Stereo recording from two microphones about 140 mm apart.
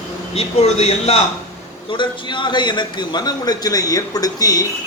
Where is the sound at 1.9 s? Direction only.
35° left (ahead or behind).